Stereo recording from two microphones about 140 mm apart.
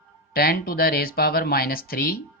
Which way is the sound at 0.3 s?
90° left.